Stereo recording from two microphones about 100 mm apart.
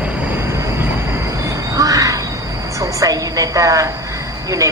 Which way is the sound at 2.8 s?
35° right (ahead or behind).